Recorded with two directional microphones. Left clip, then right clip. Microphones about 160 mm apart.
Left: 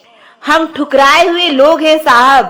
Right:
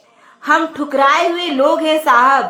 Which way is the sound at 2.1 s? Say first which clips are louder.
Left 4 dB; 30° left (ahead or behind).